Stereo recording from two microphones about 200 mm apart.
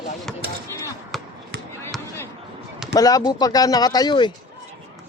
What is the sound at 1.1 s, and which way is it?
Basketball bounce, centre (ahead or behind).